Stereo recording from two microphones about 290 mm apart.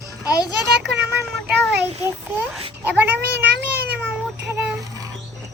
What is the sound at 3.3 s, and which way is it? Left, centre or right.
Cat, right.